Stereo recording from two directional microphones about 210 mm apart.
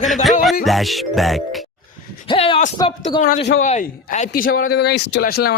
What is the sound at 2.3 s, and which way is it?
Speech, 25° left (ahead or behind).